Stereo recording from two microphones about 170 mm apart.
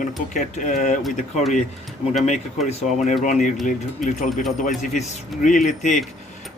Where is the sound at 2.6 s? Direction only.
45° left (ahead or behind).